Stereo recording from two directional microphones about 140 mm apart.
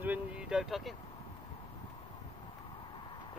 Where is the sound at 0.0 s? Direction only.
10° right (ahead or behind).